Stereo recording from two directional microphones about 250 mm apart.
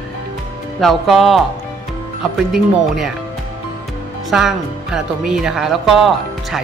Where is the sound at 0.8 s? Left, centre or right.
Centre.